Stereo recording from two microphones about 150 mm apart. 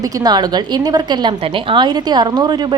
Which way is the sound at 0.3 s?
30° right (ahead or behind).